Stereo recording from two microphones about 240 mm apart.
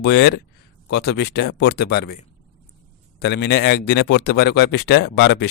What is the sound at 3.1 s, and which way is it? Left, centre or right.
Speech, left.